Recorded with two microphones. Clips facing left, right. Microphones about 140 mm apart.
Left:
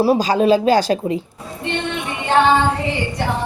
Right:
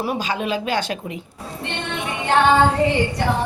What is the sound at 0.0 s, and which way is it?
Speech, 35° left (ahead or behind).